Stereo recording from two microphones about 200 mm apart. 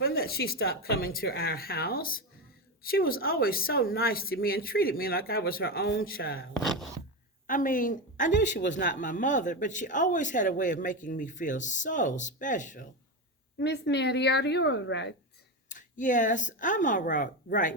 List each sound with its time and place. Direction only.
0.0 s a woman's voice: 50° left (ahead or behind)
13.6 s a woman's voice: 55° left (ahead or behind)
15.7 s speech: 40° left (ahead or behind)